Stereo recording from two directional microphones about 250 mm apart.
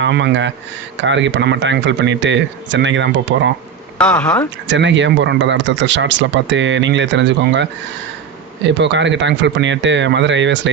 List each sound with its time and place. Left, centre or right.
0.0 s speech: right
3.9 s speech: centre
4.7 s speech: right
8.8 s speech: right